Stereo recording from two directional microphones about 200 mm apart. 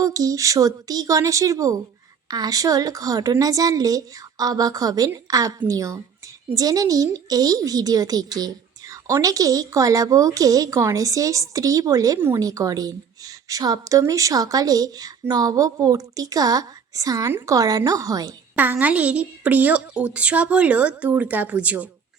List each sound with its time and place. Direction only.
0.0 s speech: 15° right (ahead or behind)